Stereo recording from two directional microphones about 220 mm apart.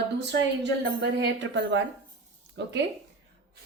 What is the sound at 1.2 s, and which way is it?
A woman's voice, 55° right (ahead or behind).